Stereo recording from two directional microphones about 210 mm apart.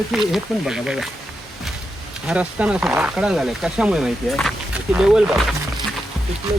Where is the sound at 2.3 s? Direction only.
5° right (ahead or behind).